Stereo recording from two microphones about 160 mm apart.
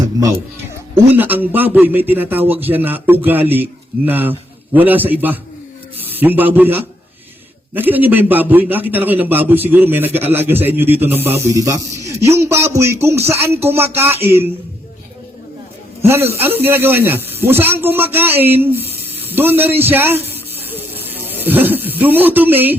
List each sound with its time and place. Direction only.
1.1 s a man's voice: 10° right (ahead or behind)
16.0 s a man's voice: 15° right (ahead or behind)